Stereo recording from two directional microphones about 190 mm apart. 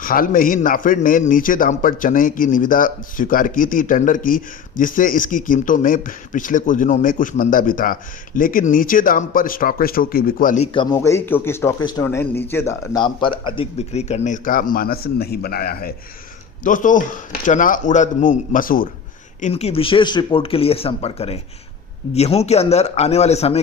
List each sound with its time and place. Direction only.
0.0 s a man's voice: 45° left (ahead or behind)
10.9 s a man's voice: 15° left (ahead or behind); by 18.9 s 45° left (ahead or behind)
19.4 s a man's voice: 35° left (ahead or behind)